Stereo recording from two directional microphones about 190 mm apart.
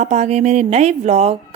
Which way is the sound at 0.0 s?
35° right (ahead or behind).